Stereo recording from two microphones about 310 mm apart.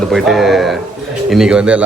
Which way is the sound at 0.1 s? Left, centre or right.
Centre.